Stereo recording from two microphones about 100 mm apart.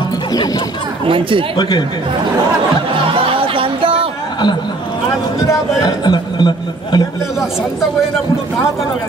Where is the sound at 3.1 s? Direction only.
60° right (ahead or behind).